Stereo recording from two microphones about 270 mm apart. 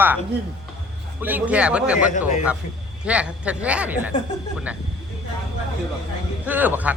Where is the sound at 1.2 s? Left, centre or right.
Centre.